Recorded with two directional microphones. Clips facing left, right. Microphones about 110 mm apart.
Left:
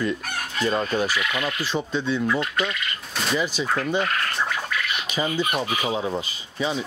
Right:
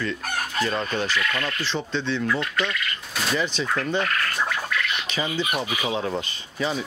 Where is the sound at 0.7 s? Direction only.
10° left (ahead or behind).